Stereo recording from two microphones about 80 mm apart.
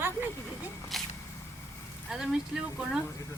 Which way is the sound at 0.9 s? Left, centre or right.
Centre.